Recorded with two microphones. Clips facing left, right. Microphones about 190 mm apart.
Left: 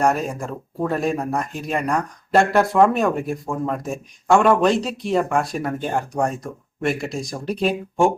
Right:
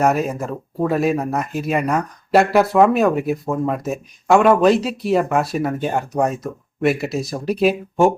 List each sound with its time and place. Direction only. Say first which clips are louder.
0.0 s speech: right 2 dB; 5° right (ahead or behind)